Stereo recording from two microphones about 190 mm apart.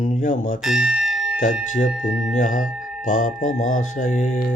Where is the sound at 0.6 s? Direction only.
5° right (ahead or behind).